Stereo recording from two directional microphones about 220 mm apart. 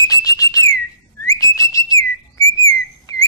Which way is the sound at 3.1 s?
15° left (ahead or behind).